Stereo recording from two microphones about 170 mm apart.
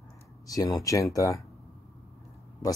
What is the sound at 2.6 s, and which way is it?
Speech, 25° left (ahead or behind).